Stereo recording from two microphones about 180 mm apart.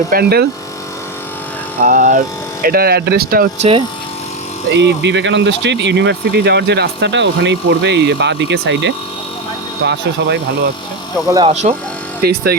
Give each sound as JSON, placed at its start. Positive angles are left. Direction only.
{"t": 0.1, "sound": "speech", "side_deg": -60}
{"t": 1.8, "sound": "speech", "side_deg": -50}
{"t": 3.6, "sound": "speech", "side_deg": -30}
{"t": 4.7, "sound": "speech", "side_deg": -75}
{"t": 11.4, "sound": "speech", "side_deg": -40}
{"t": 12.2, "sound": "speech", "side_deg": -60}